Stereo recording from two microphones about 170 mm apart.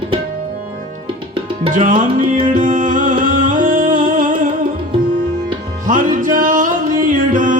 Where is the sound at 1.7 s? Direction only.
50° right (ahead or behind).